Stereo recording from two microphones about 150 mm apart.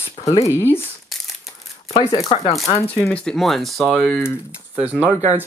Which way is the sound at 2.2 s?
40° left (ahead or behind).